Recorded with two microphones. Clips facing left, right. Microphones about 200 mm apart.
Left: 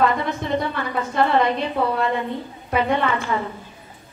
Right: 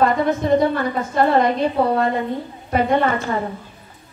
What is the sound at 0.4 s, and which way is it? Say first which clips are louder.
Speech: right 9 dB; 45° right (ahead or behind).